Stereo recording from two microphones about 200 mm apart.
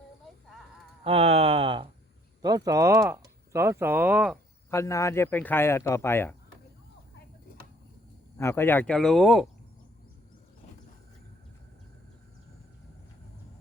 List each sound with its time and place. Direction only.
1.0 s speech: 30° right (ahead or behind); by 4.4 s 5° right (ahead or behind)
4.7 s speech: 15° left (ahead or behind)
8.4 s speech: 10° left (ahead or behind)